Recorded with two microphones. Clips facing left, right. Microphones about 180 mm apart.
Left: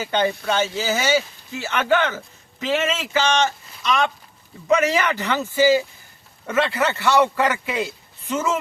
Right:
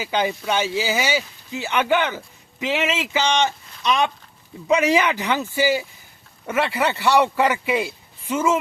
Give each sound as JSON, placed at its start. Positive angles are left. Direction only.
{"t": 0.0, "sound": "speech", "side_deg": -10}